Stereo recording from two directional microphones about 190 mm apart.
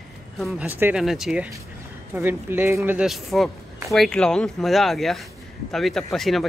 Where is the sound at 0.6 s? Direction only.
10° right (ahead or behind).